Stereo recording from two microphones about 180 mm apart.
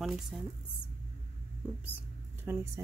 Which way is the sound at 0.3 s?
5° right (ahead or behind).